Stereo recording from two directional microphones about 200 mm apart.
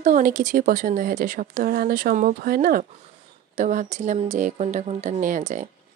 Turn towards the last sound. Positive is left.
turn(degrees=-40)  # may be behind; listen again after turning